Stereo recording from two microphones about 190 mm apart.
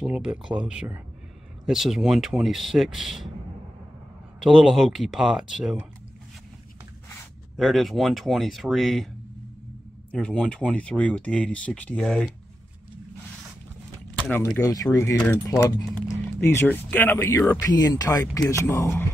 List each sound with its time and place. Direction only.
0.0 s speech: 5° right (ahead or behind)
4.4 s speech: centre (ahead or behind)
7.5 s speech: centre (ahead or behind)
10.1 s speech: 5° left (ahead or behind)
14.6 s speech: 15° left (ahead or behind)